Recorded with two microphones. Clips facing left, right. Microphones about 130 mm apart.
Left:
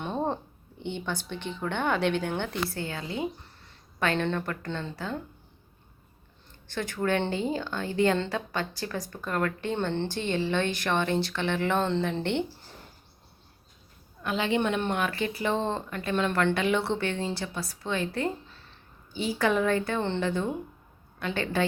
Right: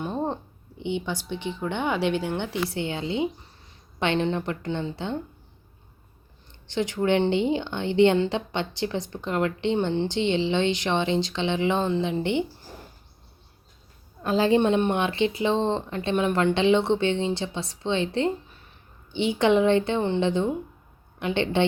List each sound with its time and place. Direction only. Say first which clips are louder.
1.0 s speech: right 3 dB; 15° right (ahead or behind)
2.7 s a woman's voice: right 6 dB; 25° right (ahead or behind)
6.7 s a woman's voice: right 5 dB; 20° right (ahead or behind)
14.2 s a woman's voice: right 6 dB; 35° right (ahead or behind)